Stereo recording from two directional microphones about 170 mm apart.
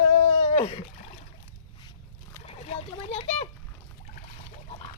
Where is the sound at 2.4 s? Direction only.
35° left (ahead or behind).